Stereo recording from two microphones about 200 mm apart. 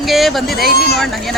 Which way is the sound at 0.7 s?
50° left (ahead or behind).